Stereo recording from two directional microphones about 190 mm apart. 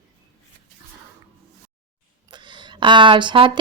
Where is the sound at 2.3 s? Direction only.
25° right (ahead or behind).